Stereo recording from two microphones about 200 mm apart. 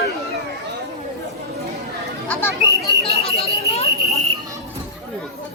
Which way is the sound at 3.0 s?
30° left (ahead or behind).